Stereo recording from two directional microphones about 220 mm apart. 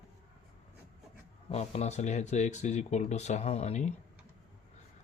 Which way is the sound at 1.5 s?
30° left (ahead or behind).